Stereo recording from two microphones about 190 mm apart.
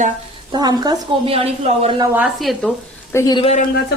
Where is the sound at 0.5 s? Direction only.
20° right (ahead or behind).